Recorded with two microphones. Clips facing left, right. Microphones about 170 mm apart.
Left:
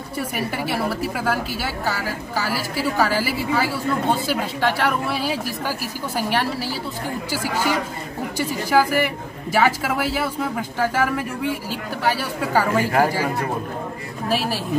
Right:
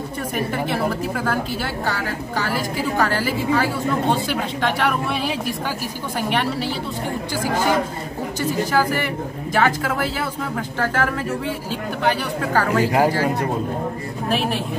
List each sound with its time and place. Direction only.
0.7 s a woman's voice: 10° left (ahead or behind)
8.4 s a woman's voice: 10° left (ahead or behind)
12.8 s speech: 15° right (ahead or behind)
14.3 s a woman's voice: 5° left (ahead or behind)